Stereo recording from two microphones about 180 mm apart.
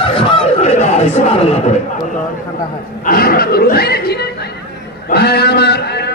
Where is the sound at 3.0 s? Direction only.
55° left (ahead or behind).